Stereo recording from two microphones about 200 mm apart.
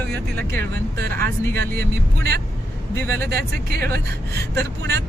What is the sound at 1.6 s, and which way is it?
Speech, 55° right (ahead or behind).